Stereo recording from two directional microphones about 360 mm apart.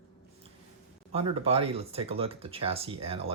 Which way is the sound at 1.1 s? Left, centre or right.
Centre.